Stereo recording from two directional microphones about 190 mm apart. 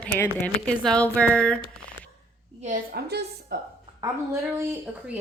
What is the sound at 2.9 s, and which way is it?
Speech, 55° right (ahead or behind).